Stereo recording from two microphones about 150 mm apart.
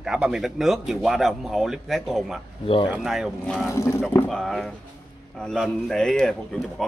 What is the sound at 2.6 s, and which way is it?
Speech, 35° left (ahead or behind).